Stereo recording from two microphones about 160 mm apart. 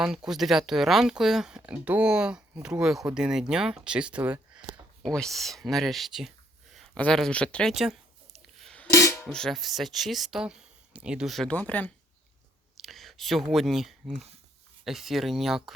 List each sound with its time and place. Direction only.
0.0 s speech: 5° right (ahead or behind)
5.0 s speech: centre (ahead or behind)
6.7 s a sound: 5° left (ahead or behind)
8.9 s music: 20° left (ahead or behind)
9.2 s speech: 5° left (ahead or behind)